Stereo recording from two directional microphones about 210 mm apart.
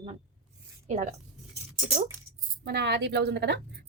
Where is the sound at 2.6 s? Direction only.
50° right (ahead or behind).